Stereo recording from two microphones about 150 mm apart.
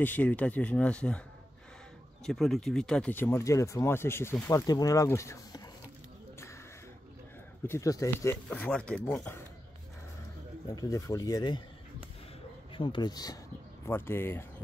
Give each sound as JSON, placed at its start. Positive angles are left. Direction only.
{"t": 0.0, "sound": "speech", "side_deg": 10}
{"t": 2.2, "sound": "speech", "side_deg": 0}
{"t": 7.6, "sound": "speech", "side_deg": 20}
{"t": 8.5, "sound": "speech", "side_deg": 5}
{"t": 10.8, "sound": "speech", "side_deg": 20}
{"t": 12.7, "sound": "speech", "side_deg": 30}
{"t": 13.8, "sound": "speech", "side_deg": 15}